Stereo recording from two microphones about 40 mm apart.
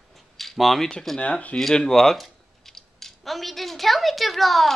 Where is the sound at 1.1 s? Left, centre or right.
Left.